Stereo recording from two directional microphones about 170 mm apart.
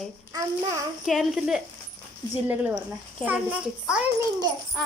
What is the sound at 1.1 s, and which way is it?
A child's voice, centre (ahead or behind).